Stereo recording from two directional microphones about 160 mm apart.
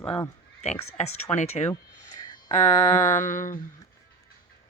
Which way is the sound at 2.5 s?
50° left (ahead or behind).